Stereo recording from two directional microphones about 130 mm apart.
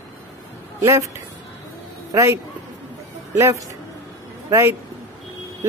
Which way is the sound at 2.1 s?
25° right (ahead or behind).